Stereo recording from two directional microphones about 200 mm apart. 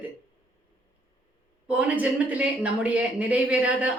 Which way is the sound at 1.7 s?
5° right (ahead or behind).